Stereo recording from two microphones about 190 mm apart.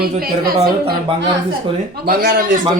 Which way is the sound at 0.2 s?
55° right (ahead or behind).